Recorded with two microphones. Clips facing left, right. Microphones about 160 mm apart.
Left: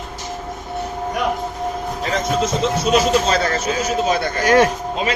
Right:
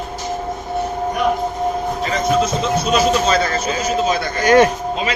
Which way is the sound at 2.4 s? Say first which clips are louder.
Right 1 dB; 20° left (ahead or behind).